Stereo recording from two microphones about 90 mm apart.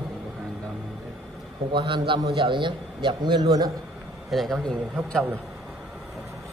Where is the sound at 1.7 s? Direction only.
65° right (ahead or behind); by 3.7 s 45° right (ahead or behind).